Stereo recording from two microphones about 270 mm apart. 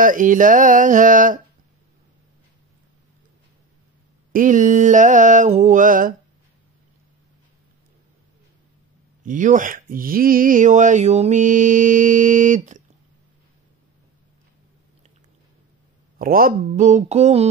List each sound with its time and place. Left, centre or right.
0.0 s speech: right
4.3 s speech: right
9.2 s speech: right
16.2 s speech: right